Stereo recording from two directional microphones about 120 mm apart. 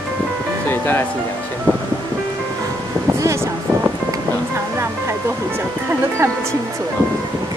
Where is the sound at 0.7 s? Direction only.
20° left (ahead or behind).